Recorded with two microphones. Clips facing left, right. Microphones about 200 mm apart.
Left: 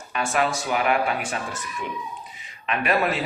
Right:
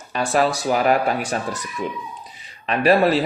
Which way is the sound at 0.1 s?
35° right (ahead or behind).